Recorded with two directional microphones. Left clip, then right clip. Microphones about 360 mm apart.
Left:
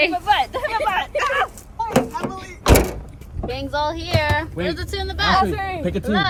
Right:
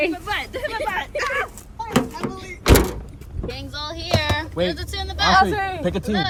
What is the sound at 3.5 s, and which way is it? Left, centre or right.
Speech, centre.